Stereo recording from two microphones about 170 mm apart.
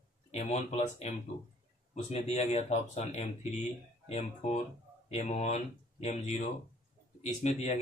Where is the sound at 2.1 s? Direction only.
40° left (ahead or behind).